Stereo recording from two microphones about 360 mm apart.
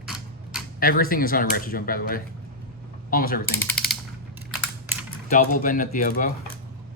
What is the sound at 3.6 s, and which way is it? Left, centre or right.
Typing, centre.